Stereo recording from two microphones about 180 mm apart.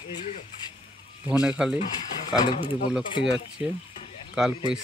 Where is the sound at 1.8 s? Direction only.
45° left (ahead or behind).